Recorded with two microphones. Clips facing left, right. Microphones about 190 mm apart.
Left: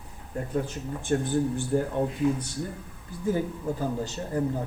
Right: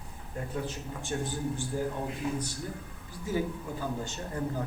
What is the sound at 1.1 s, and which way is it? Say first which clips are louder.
Speech: left 8 dB; 55° left (ahead or behind).